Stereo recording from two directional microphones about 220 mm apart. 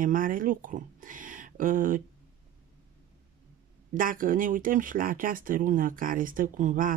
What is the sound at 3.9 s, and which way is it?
Speech, 40° right (ahead or behind).